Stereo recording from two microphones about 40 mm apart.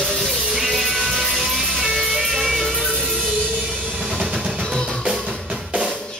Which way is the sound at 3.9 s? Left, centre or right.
Centre.